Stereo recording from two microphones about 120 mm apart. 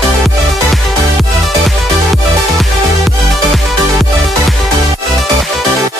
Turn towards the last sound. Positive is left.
turn(degrees=0)  # may be behind; listen again after turning